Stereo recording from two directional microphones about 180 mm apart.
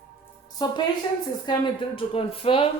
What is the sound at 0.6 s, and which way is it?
Speech, 25° left (ahead or behind).